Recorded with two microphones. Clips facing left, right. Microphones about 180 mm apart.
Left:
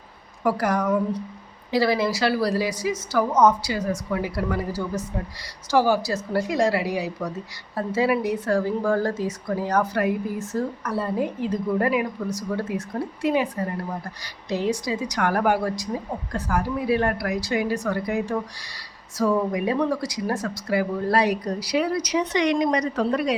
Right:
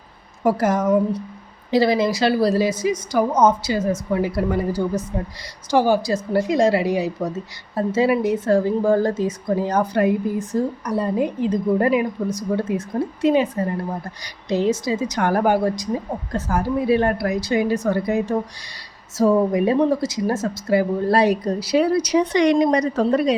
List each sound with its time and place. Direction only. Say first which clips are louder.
0.4 s a woman's voice: right 4 dB; 20° right (ahead or behind)